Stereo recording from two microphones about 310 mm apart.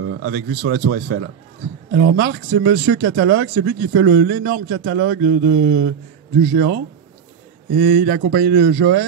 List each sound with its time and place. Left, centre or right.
0.1 s speech: right